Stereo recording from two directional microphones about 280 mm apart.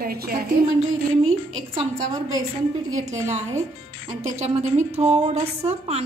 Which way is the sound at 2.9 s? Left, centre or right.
Right.